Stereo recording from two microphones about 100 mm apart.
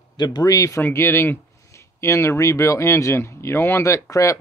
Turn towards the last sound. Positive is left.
turn(degrees=30)  # may be behind; listen again after turning